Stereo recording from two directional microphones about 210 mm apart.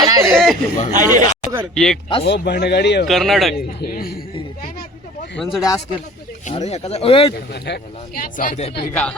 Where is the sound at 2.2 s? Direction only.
55° left (ahead or behind).